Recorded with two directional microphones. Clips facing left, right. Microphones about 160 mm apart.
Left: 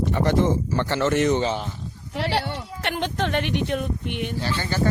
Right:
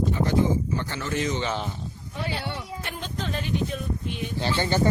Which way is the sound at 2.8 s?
70° left (ahead or behind).